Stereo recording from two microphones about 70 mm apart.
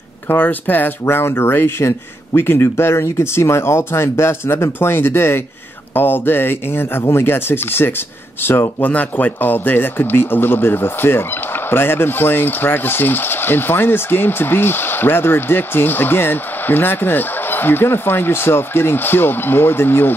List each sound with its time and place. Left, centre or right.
0.3 s speech: left